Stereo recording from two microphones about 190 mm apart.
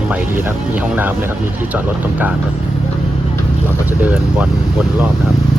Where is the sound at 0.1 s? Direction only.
10° right (ahead or behind).